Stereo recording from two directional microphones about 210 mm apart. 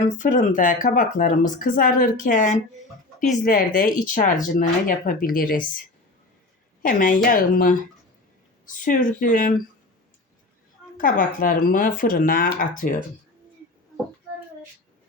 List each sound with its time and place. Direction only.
0.0 s speech: 35° left (ahead or behind)
6.8 s speech: 40° left (ahead or behind)
10.9 s speech: 40° left (ahead or behind)